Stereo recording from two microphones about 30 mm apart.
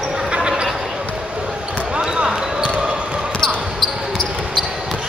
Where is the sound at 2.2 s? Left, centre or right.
Right.